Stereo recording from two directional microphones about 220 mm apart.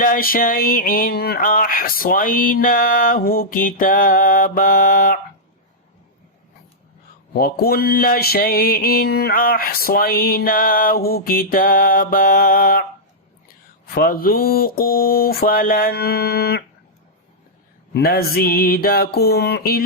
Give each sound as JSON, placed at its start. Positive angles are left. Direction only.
{"t": 0.0, "sound": "mantra", "side_deg": 40}
{"t": 7.3, "sound": "mantra", "side_deg": 45}
{"t": 13.8, "sound": "mantra", "side_deg": 40}
{"t": 17.9, "sound": "mantra", "side_deg": 45}